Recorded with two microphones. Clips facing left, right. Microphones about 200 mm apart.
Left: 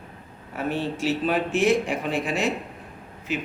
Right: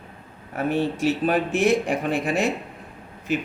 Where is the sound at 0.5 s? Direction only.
55° right (ahead or behind).